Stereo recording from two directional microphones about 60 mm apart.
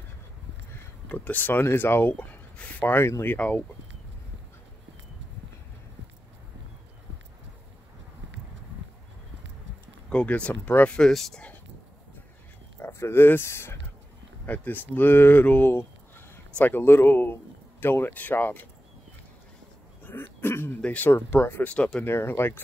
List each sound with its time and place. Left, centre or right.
1.0 s speech: left
2.1 s speech: left
3.0 s speech: left
3.3 s speech: left
10.0 s speech: centre
10.6 s speech: left
11.1 s speech: centre
12.7 s speech: left
14.4 s speech: left
20.1 s throat clearing: left
20.8 s speech: left
21.1 s speech: left
21.6 s speech: left
22.0 s speech: left